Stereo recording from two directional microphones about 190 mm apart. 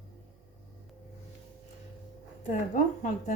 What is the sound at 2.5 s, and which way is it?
Speech, 40° left (ahead or behind).